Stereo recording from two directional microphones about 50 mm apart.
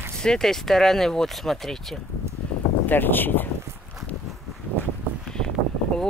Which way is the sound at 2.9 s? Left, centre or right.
Left.